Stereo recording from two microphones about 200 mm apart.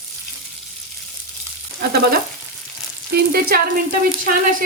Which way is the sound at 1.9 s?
50° right (ahead or behind).